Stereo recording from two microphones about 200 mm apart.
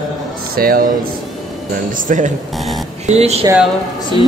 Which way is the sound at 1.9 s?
40° right (ahead or behind).